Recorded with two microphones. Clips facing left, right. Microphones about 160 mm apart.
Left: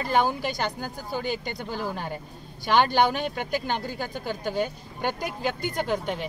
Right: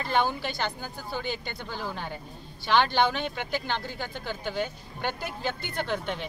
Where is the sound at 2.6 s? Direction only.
45° left (ahead or behind).